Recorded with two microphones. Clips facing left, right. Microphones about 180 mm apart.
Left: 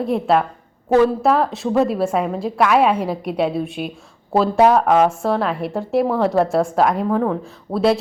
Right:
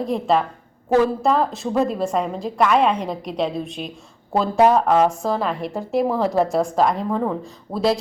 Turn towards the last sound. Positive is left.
turn(degrees=5)  # may be behind; listen again after turning